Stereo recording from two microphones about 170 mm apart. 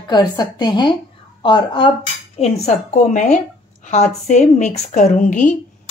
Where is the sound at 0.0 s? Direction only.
25° left (ahead or behind).